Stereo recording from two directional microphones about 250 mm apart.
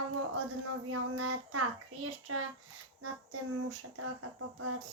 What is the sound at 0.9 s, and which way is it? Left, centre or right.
Child singing, right.